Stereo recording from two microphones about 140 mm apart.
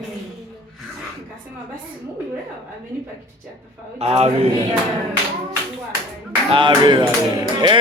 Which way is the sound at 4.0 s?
50° right (ahead or behind).